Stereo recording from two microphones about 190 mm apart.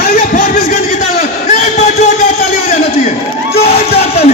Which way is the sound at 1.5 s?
40° left (ahead or behind).